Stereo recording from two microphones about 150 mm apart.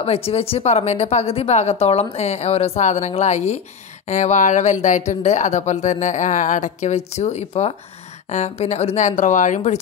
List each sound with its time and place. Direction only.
0.0 s speech: 40° left (ahead or behind)